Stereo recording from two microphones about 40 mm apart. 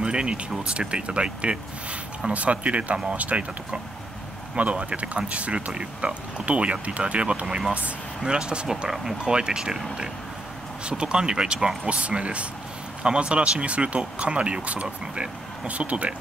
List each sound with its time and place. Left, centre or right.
0.0 s speech: right
4.6 s speech: right
8.6 s speech: centre
9.2 s speech: right